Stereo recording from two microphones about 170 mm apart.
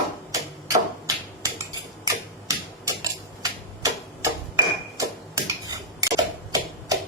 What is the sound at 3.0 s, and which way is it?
Tick-tock, 20° right (ahead or behind).